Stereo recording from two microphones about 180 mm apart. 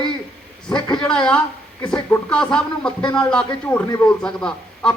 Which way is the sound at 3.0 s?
25° left (ahead or behind).